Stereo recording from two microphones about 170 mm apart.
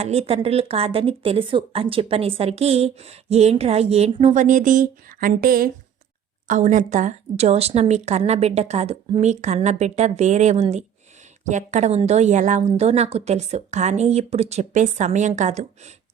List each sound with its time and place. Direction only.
0.0 s speech: 35° right (ahead or behind)